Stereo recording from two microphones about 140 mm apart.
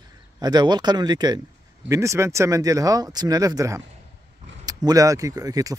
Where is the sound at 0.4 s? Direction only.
30° right (ahead or behind).